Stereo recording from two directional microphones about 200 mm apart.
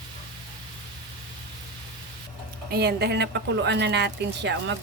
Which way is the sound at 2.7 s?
55° right (ahead or behind).